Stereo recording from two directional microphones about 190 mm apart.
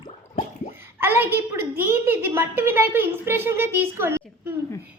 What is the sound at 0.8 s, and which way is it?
A child's voice, 10° right (ahead or behind).